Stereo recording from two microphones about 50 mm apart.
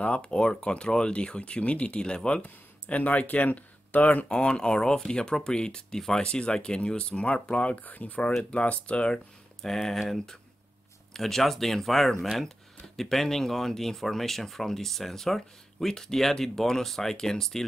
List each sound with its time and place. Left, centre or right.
0.0 s speech: left
2.4 s speech: left
4.3 s speech: centre
9.6 s speech: centre